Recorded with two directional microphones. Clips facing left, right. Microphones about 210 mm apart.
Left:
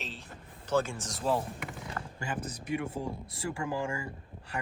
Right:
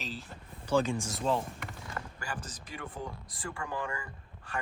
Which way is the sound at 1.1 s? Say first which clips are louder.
Left 5 dB; centre (ahead or behind).